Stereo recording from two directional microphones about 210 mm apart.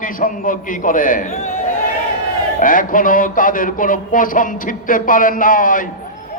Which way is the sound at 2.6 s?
40° left (ahead or behind).